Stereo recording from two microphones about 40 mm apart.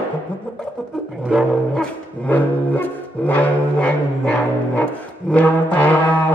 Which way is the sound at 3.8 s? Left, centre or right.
Left.